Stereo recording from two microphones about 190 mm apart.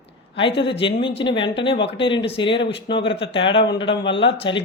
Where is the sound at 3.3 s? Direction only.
25° left (ahead or behind).